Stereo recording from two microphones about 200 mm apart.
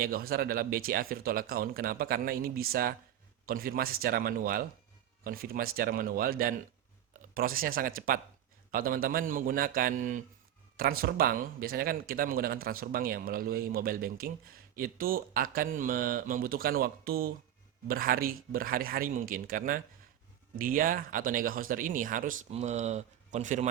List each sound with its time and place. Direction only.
0.0 s speech: 50° right (ahead or behind)